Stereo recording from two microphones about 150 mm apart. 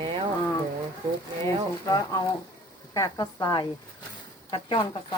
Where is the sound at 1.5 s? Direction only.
25° left (ahead or behind).